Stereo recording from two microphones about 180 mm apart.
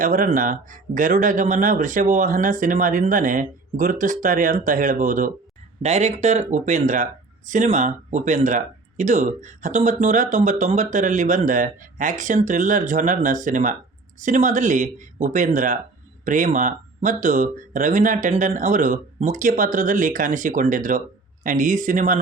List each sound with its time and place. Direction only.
0.0 s speech: 45° right (ahead or behind)